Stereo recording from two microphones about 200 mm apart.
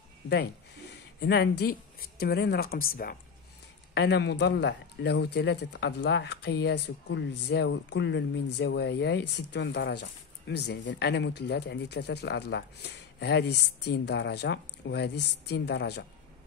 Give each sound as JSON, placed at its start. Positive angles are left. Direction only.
{"t": 1.2, "sound": "a woman's voice", "side_deg": 55}
{"t": 3.9, "sound": "speech", "side_deg": 60}